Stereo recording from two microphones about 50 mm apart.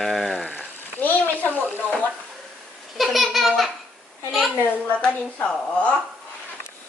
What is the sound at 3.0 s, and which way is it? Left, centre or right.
Babbling, centre.